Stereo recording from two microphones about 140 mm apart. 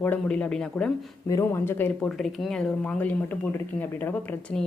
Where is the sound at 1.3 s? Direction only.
20° left (ahead or behind).